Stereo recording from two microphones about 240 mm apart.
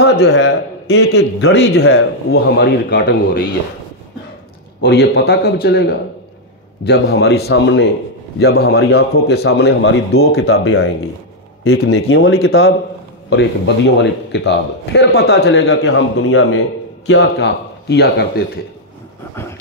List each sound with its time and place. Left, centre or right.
0.0 s a man's voice: left
1.8 s a man's voice: left
2.3 s a man's voice: left
4.8 s a man's voice: left
10.5 s a man's voice: left
15.7 s a man's voice: left
17.2 s a man's voice: left